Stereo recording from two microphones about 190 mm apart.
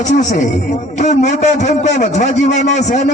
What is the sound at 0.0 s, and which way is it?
A man's voice, 40° left (ahead or behind).